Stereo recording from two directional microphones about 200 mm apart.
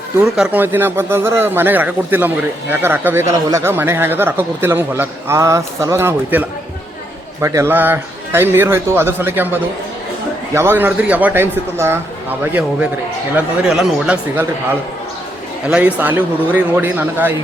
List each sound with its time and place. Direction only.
0.2 s a man's voice: 10° right (ahead or behind)
13.3 s a man's voice: 5° right (ahead or behind)